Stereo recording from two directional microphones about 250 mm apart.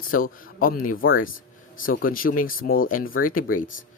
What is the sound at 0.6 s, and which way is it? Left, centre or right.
Speech, left.